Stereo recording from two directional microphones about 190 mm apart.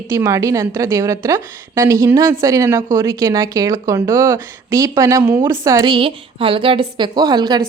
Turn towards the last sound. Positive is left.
turn(degrees=-20)  # may be behind; listen again after turning